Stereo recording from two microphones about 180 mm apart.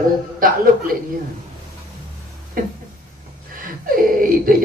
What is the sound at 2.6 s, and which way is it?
Speech, 50° right (ahead or behind).